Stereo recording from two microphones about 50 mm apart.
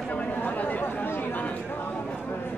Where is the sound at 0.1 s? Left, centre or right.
Left.